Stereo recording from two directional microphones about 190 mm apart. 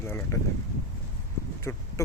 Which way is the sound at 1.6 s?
15° left (ahead or behind).